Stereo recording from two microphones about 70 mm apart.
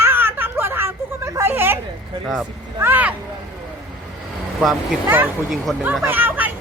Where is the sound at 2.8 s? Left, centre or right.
Right.